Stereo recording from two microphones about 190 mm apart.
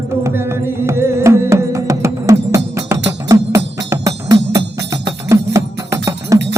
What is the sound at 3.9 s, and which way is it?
Music, 15° right (ahead or behind).